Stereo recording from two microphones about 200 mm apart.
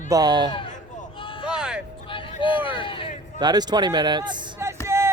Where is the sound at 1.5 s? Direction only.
5° right (ahead or behind).